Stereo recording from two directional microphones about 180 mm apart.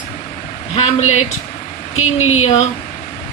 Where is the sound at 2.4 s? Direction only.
35° left (ahead or behind).